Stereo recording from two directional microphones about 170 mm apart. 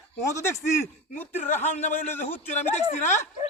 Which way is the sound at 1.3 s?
45° left (ahead or behind).